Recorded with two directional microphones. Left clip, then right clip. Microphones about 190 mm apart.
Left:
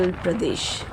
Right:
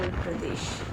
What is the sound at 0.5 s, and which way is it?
Speech, 40° left (ahead or behind).